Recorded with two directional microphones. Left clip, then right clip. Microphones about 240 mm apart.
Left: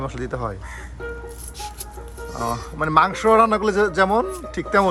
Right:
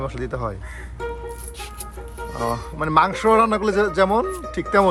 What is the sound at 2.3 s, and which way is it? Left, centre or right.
Speech, centre.